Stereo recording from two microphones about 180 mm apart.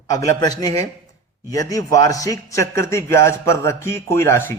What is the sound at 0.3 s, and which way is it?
A man's voice, 20° left (ahead or behind).